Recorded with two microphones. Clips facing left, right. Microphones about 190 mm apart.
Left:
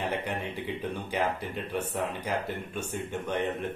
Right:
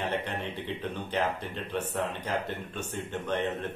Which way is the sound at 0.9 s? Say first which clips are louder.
Even; 10° left (ahead or behind).